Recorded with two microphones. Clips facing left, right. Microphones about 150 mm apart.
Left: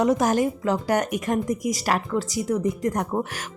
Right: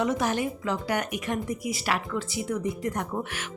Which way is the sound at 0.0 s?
40° left (ahead or behind).